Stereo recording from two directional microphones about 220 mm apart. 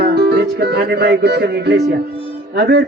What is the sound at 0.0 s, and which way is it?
Music, 50° right (ahead or behind).